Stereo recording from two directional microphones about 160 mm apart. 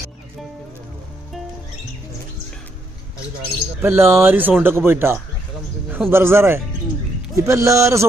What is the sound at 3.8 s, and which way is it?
A man's voice, 15° right (ahead or behind).